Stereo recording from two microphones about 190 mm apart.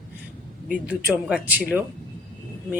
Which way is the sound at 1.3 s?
10° right (ahead or behind).